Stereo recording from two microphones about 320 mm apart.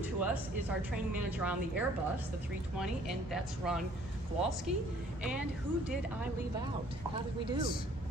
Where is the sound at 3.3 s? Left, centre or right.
Centre.